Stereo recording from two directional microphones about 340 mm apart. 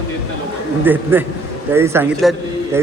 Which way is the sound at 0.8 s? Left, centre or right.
Centre.